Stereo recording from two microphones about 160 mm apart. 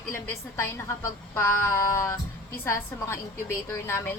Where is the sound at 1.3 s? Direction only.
20° left (ahead or behind).